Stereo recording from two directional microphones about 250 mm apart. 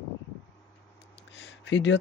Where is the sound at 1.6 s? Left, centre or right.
Left.